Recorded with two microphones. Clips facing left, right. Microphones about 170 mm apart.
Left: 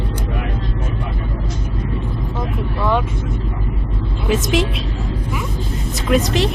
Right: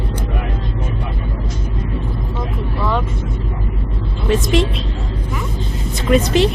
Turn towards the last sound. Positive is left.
turn(degrees=0)  # may be behind; listen again after turning